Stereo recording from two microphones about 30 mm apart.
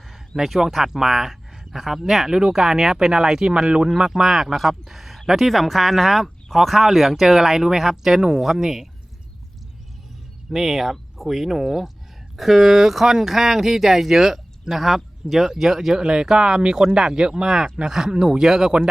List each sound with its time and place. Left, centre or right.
0.4 s speech: centre
10.5 s speech: centre
12.4 s speech: centre
16.0 s speech: right